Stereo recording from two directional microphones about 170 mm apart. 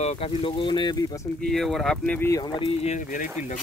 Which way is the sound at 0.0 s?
35° left (ahead or behind).